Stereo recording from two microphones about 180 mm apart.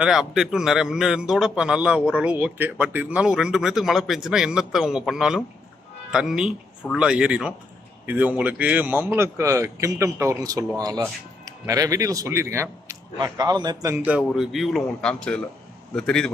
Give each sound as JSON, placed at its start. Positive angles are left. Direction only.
{"t": 0.0, "sound": "a man's voice", "side_deg": -5}
{"t": 14.0, "sound": "a man's voice", "side_deg": -5}